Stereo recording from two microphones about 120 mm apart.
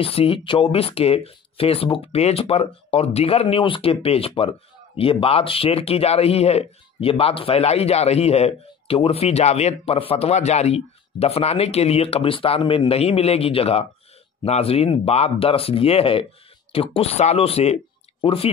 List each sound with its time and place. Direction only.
0.0 s speech: 50° left (ahead or behind)